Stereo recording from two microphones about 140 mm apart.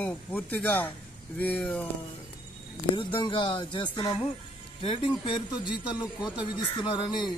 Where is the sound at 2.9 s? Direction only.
35° left (ahead or behind).